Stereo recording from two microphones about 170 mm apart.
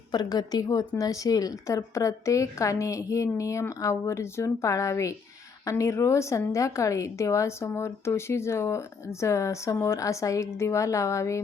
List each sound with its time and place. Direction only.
0.1 s a woman's voice: 25° left (ahead or behind)